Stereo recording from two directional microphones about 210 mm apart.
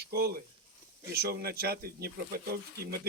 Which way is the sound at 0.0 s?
50° right (ahead or behind).